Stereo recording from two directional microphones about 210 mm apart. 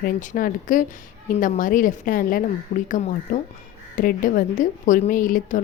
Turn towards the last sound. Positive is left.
turn(degrees=40)  # may be behind; listen again after turning